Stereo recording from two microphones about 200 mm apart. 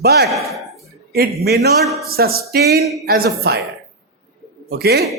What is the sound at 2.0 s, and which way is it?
Speech, 50° right (ahead or behind).